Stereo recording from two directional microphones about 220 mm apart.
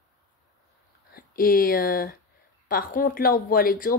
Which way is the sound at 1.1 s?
40° left (ahead or behind).